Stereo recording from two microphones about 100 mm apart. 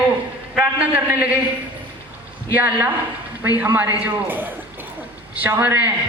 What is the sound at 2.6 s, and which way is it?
A man's voice, 20° right (ahead or behind).